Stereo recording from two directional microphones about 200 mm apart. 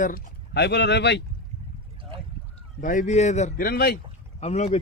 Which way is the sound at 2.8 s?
40° left (ahead or behind).